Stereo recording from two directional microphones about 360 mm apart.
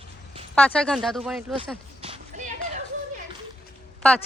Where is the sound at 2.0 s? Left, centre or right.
Centre.